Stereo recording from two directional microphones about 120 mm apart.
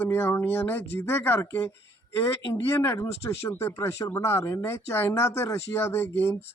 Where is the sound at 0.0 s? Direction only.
20° left (ahead or behind).